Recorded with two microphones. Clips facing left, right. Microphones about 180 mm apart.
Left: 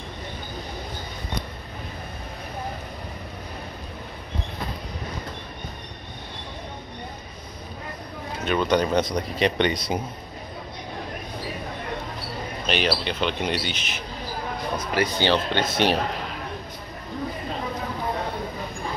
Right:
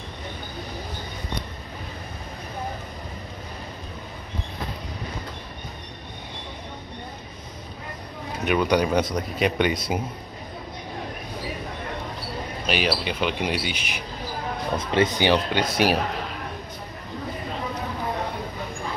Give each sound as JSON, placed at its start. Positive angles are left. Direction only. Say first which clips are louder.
{"t": 8.5, "sound": "speech", "louder": "right 1 dB", "side_deg": -15}
{"t": 12.6, "sound": "speech", "louder": "even", "side_deg": -10}
{"t": 14.8, "sound": "speech", "louder": "right 3 dB", "side_deg": -25}
{"t": 15.1, "sound": "speech", "louder": "right 1 dB", "side_deg": -15}